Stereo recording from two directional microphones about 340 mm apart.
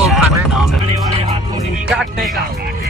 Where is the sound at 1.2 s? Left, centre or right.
Centre.